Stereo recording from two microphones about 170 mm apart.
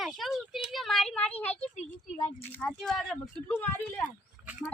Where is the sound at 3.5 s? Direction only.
15° left (ahead or behind).